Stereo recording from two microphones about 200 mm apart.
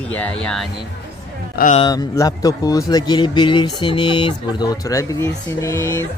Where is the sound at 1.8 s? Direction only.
20° left (ahead or behind).